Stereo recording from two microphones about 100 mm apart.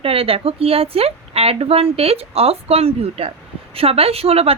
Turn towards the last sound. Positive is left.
turn(degrees=-80)